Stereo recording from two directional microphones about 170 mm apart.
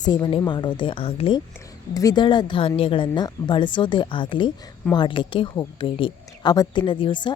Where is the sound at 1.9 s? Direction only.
20° left (ahead or behind).